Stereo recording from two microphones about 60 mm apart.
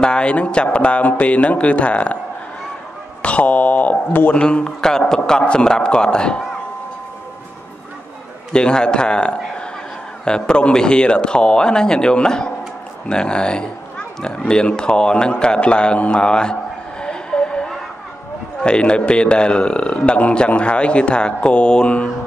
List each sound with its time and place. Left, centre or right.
0.0 s a man's voice: centre
3.2 s a man's voice: left
4.3 s a man's voice: centre
8.5 s a man's voice: centre
17.0 s vehicle: centre
18.6 s a man's voice: centre